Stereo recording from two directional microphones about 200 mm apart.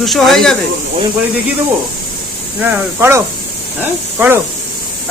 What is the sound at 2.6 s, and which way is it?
Speech, 10° right (ahead or behind).